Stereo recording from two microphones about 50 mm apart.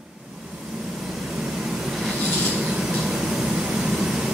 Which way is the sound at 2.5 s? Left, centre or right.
Centre.